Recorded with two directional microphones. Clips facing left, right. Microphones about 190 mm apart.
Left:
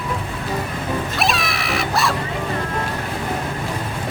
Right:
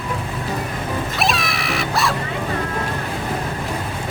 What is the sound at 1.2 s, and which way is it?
Screaming, centre (ahead or behind).